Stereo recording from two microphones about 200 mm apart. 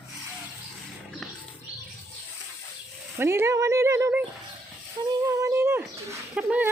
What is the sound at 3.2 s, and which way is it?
Speech, 10° right (ahead or behind).